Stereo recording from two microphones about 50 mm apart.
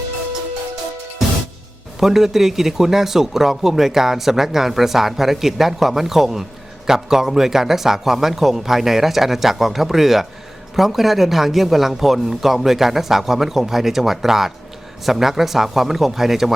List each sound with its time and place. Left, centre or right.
2.0 s speech: centre